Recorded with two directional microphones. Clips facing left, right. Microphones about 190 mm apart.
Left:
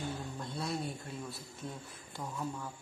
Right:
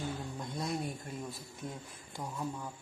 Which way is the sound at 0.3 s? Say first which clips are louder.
Right 1 dB; 10° right (ahead or behind).